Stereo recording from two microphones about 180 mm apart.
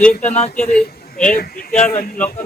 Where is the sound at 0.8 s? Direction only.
50° left (ahead or behind).